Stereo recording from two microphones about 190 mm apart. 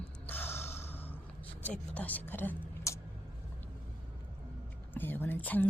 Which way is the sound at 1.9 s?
10° left (ahead or behind).